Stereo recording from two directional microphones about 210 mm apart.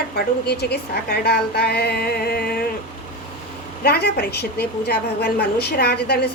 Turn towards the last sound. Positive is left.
turn(degrees=50)  # may be behind; listen again after turning